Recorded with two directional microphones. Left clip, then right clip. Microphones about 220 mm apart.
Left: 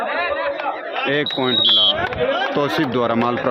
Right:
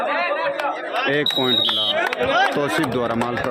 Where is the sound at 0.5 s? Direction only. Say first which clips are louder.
Even; 50° right (ahead or behind).